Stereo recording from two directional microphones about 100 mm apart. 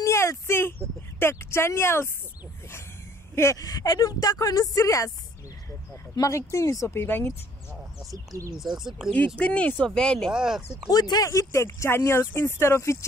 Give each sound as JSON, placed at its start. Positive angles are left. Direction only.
{"t": 0.0, "sound": "speech", "side_deg": 30}
{"t": 3.3, "sound": "speech", "side_deg": 35}
{"t": 6.1, "sound": "speech", "side_deg": 30}
{"t": 8.1, "sound": "speech", "side_deg": -35}
{"t": 8.5, "sound": "speech", "side_deg": -5}
{"t": 9.4, "sound": "speech", "side_deg": 10}
{"t": 10.3, "sound": "speech", "side_deg": -5}
{"t": 10.9, "sound": "speech", "side_deg": 40}